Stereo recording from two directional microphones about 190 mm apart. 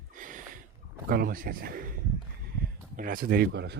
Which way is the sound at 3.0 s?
50° right (ahead or behind).